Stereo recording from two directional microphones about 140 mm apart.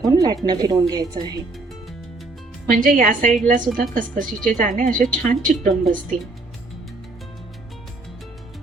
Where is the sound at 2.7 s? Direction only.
75° right (ahead or behind).